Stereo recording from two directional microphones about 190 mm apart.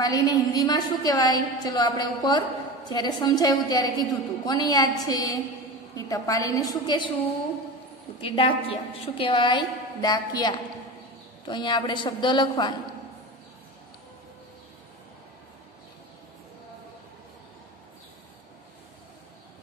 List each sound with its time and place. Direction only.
0.0 s a woman's voice: 20° left (ahead or behind)
8.2 s a woman's voice: 30° left (ahead or behind)